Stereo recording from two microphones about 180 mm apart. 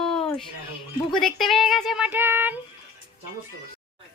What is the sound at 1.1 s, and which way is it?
Speech, centre (ahead or behind).